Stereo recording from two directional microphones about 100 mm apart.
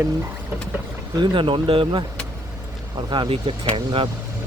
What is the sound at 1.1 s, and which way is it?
Speech, 55° right (ahead or behind).